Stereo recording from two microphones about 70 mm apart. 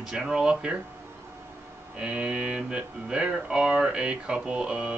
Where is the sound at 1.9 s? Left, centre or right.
Centre.